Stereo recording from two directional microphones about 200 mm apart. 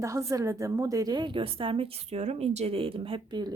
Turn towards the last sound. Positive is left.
turn(degrees=-25)  # may be behind; listen again after turning